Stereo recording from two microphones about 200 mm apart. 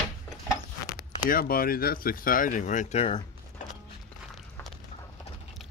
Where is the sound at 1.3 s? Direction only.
45° left (ahead or behind); by 3.2 s 30° left (ahead or behind).